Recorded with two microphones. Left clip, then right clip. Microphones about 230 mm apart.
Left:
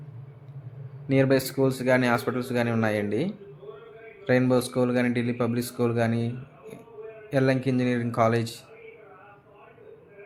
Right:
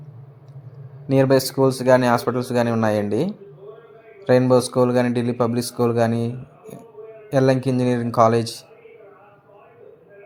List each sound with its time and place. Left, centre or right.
1.0 s speech: centre